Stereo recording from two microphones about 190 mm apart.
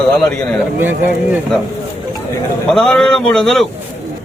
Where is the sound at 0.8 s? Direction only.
10° right (ahead or behind).